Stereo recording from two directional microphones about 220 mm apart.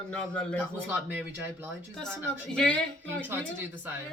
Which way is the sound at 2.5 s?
5° left (ahead or behind).